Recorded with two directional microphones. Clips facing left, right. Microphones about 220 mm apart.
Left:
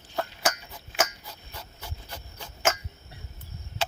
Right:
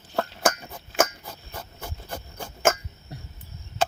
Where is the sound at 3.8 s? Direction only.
50° right (ahead or behind).